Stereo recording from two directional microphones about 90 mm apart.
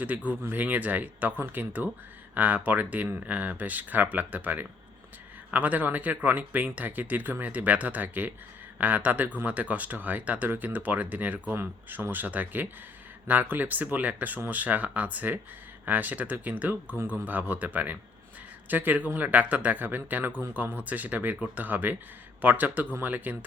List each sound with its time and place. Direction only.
0.3 s speech: 20° right (ahead or behind)